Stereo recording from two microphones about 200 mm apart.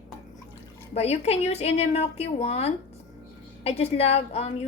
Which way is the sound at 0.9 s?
30° left (ahead or behind).